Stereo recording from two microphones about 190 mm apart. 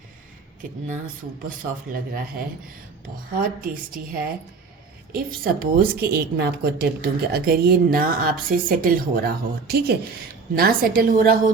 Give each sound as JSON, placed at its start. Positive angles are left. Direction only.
{"t": 3.3, "sound": "a woman's voice", "side_deg": -50}